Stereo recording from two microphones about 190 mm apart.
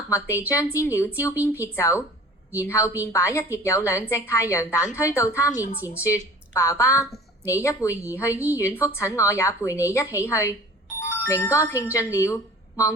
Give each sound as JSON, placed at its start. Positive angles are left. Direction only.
{"t": 0.1, "sound": "a woman's voice", "side_deg": 15}